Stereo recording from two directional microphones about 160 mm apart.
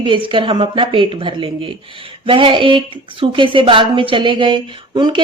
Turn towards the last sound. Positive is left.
turn(degrees=-30)  # may be behind; listen again after turning